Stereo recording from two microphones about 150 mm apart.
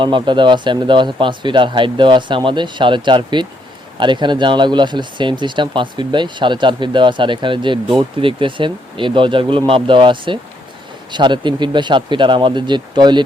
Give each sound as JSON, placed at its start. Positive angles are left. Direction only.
{"t": 0.0, "sound": "speech", "side_deg": -30}